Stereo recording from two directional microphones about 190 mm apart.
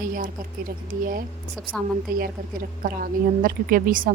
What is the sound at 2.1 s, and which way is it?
A woman's voice, 50° right (ahead or behind).